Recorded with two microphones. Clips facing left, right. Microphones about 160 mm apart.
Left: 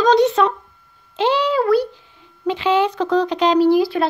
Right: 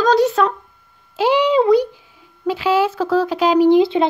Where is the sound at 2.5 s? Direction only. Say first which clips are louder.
Even; 5° right (ahead or behind).